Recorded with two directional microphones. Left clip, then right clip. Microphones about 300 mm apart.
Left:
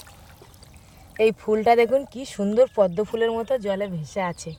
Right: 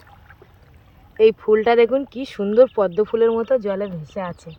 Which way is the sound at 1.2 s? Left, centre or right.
Left.